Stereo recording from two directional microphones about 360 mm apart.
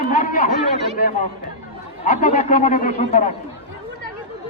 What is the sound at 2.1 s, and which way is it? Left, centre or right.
A man's voice, centre.